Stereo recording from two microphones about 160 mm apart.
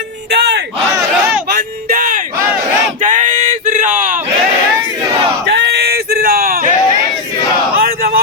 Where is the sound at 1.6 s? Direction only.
60° right (ahead or behind).